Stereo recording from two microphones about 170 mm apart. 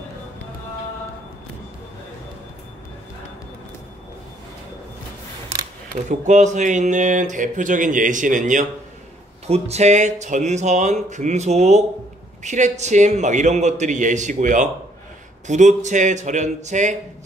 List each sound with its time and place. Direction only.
5.9 s speech: 45° right (ahead or behind)